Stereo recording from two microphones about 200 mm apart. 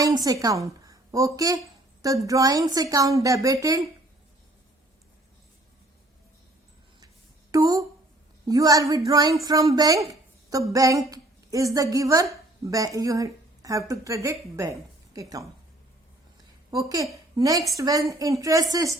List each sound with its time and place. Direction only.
0.0 s speech: 20° right (ahead or behind)
7.5 s a woman's voice: 15° right (ahead or behind)
16.7 s a woman's voice: 15° right (ahead or behind)